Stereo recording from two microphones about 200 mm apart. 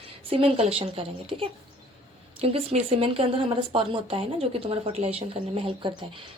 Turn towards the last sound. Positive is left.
turn(degrees=-25)  # may be behind; listen again after turning